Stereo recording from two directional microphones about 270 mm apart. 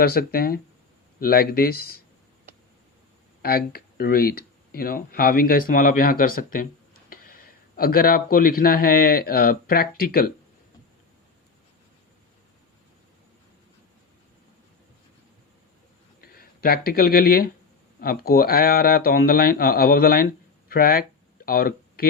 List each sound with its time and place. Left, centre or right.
0.0 s speech: left
3.4 s speech: left
16.2 s speech: left